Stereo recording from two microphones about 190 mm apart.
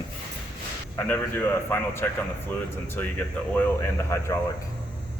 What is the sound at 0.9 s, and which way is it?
A man's voice, 10° left (ahead or behind).